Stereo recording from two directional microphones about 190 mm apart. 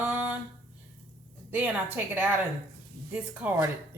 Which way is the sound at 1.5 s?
10° right (ahead or behind).